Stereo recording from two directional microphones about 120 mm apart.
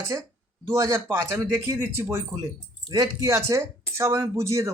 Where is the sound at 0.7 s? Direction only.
25° right (ahead or behind).